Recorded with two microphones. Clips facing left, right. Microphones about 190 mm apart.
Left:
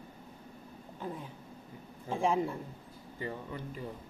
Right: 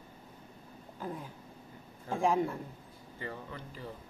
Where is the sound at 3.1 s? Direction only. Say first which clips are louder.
Left 3 dB; 15° left (ahead or behind).